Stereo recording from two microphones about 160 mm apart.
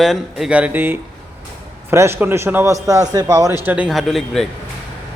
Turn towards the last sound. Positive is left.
turn(degrees=0)  # may be behind; listen again after turning